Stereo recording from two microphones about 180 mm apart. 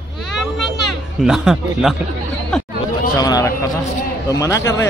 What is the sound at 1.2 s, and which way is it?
Speech, 5° right (ahead or behind).